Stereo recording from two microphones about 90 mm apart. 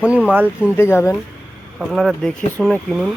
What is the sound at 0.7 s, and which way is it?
Speech, 25° left (ahead or behind).